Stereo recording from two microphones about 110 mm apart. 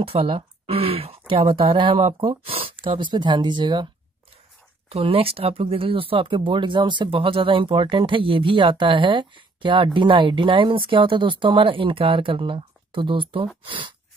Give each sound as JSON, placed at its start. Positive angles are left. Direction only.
{"t": 0.0, "sound": "speech", "side_deg": -60}
{"t": 4.8, "sound": "speech", "side_deg": -55}